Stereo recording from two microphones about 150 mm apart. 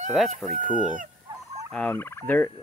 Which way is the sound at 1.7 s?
10° left (ahead or behind).